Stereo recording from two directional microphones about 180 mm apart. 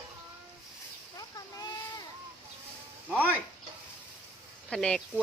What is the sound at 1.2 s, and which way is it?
Splash, 20° left (ahead or behind).